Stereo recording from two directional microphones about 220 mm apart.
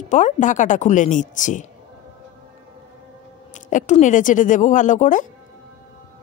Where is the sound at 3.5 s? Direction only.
35° left (ahead or behind).